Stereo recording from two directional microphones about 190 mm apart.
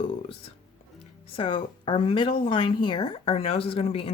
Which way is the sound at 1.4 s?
25° left (ahead or behind).